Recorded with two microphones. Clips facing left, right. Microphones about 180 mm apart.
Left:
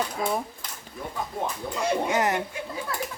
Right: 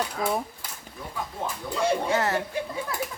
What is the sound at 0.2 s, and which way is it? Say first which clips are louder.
Speech: right 1 dB; 25° left (ahead or behind).